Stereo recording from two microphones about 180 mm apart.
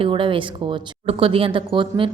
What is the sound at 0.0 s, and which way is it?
A woman's voice, 30° right (ahead or behind).